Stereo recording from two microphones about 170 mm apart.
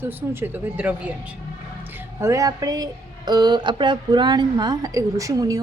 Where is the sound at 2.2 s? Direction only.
20° right (ahead or behind).